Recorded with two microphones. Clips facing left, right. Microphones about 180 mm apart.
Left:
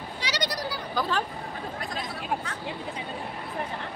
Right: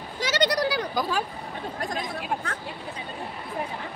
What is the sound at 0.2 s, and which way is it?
Sheep, 55° right (ahead or behind).